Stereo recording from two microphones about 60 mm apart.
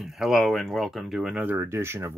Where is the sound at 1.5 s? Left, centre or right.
Right.